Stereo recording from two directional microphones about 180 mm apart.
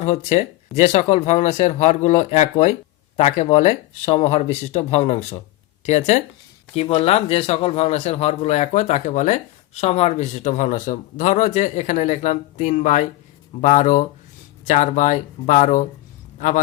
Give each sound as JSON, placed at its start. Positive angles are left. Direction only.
{"t": 0.0, "sound": "speech", "side_deg": 40}